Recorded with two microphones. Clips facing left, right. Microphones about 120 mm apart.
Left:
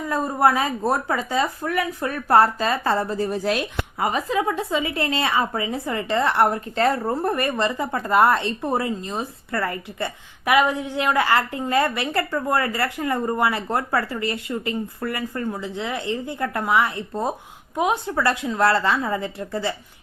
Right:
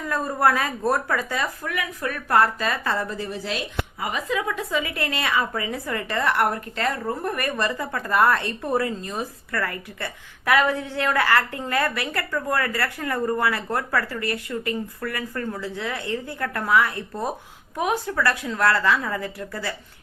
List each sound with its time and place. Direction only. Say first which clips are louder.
0.0 s a woman's voice: left 2 dB; 20° left (ahead or behind); by 4.1 s 50° left (ahead or behind)
4.1 s a woman's voice: left 2 dB; 30° left (ahead or behind)